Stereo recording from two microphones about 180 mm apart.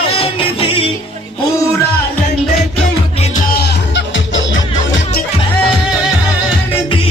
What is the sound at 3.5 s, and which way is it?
Music, 65° left (ahead or behind).